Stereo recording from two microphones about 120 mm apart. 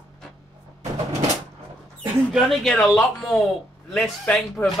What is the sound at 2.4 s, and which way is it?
Speech, centre (ahead or behind).